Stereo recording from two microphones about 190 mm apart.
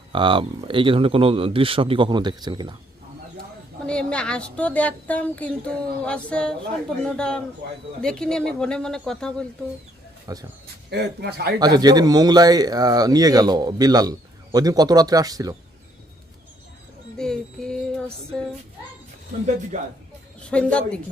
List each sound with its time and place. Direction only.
0.1 s speech: 25° right (ahead or behind)
3.8 s a woman's voice: 5° left (ahead or behind)
10.3 s speech: 20° right (ahead or behind)
10.9 s a man's voice: 60° right (ahead or behind)
11.6 s speech: 20° right (ahead or behind)
17.2 s music: 5° left (ahead or behind)
19.7 s speech: 40° right (ahead or behind)
20.5 s speech: 5° left (ahead or behind)